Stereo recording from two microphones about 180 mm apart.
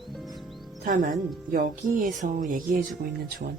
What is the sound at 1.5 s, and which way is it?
Speech, 50° right (ahead or behind).